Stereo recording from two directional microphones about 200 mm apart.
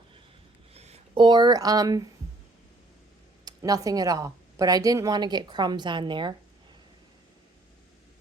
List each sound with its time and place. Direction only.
0.7 s speech: 30° right (ahead or behind)
3.4 s speech: 20° right (ahead or behind)